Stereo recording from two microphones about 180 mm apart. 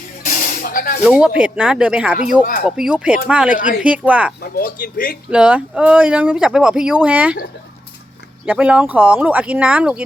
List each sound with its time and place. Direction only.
0.3 s spray: 50° left (ahead or behind)
1.0 s speech: 5° right (ahead or behind)
2.4 s speech: 50° left (ahead or behind)
2.6 s speech: 5° right (ahead or behind)
4.4 s speech: 55° left (ahead or behind)
5.3 s speech: 5° right (ahead or behind)
8.4 s speech: 5° right (ahead or behind)